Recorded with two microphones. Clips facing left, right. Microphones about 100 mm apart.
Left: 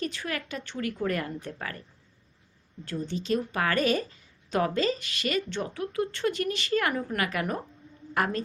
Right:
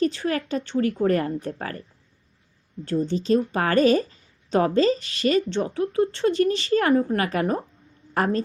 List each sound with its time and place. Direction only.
0.0 s speech: 35° right (ahead or behind)
2.8 s a woman's voice: 35° right (ahead or behind)